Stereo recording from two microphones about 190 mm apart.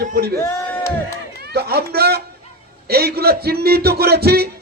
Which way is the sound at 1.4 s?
55° right (ahead or behind).